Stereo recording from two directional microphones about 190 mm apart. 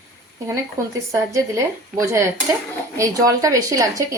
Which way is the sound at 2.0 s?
15° right (ahead or behind).